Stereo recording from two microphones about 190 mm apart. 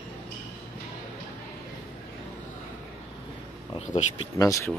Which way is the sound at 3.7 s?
30° left (ahead or behind).